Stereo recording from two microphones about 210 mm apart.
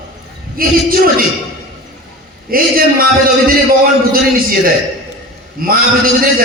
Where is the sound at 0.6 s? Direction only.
45° right (ahead or behind).